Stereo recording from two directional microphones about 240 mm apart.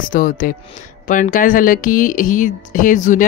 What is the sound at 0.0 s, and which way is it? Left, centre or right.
Speech, left.